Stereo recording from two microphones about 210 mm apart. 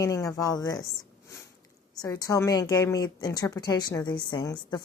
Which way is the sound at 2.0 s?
15° left (ahead or behind).